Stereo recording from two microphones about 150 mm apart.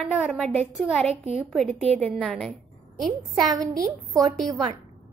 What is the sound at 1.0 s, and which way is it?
Speech, 45° right (ahead or behind).